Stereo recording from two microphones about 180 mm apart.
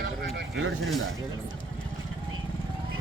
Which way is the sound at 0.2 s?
65° right (ahead or behind).